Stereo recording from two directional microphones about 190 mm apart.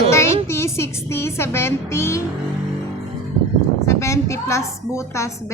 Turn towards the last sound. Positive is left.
turn(degrees=15)  # may be behind; listen again after turning